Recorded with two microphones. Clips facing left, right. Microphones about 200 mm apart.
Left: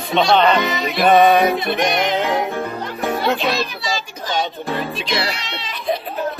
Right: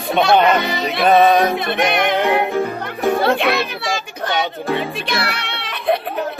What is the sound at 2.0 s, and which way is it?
Music, 60° right (ahead or behind).